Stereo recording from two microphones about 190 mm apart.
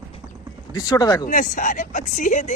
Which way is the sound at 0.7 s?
20° left (ahead or behind).